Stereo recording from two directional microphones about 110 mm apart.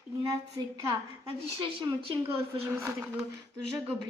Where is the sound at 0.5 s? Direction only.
30° right (ahead or behind).